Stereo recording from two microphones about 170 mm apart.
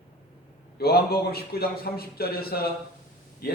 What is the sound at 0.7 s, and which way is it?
A man's voice, 65° left (ahead or behind).